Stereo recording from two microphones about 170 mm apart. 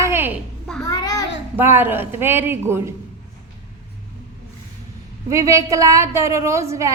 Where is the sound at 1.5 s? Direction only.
10° right (ahead or behind).